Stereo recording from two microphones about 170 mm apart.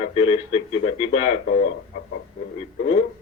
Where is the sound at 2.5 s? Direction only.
35° left (ahead or behind).